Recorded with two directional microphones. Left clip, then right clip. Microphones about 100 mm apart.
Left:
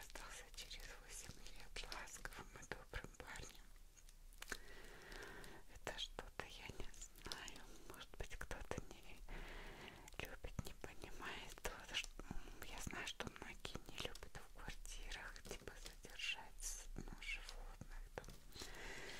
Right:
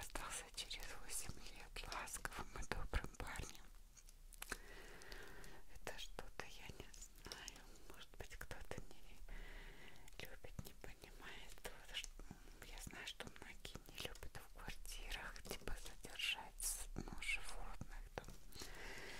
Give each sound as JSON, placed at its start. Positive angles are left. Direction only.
{"t": 0.0, "sound": "whispering", "side_deg": -40}
{"t": 4.4, "sound": "a sound", "side_deg": -15}
{"t": 5.2, "sound": "whispering", "side_deg": 10}
{"t": 9.8, "sound": "whispering", "side_deg": 25}
{"t": 13.9, "sound": "whispering", "side_deg": 5}
{"t": 15.0, "sound": "whispering", "side_deg": -15}
{"t": 18.2, "sound": "whispering", "side_deg": -10}
{"t": 18.6, "sound": "a sound", "side_deg": 0}